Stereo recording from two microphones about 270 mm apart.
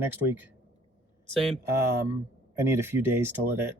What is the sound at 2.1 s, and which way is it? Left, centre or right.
Speech, centre.